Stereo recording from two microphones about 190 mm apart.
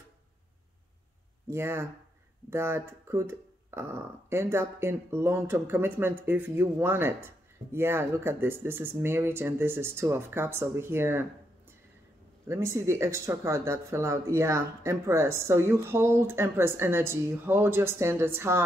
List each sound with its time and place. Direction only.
1.5 s speech: 15° right (ahead or behind)
12.4 s speech: 15° right (ahead or behind)